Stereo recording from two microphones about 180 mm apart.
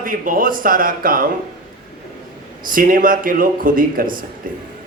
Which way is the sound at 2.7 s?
50° right (ahead or behind).